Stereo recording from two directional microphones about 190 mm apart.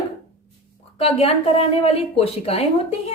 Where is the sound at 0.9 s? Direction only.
30° left (ahead or behind).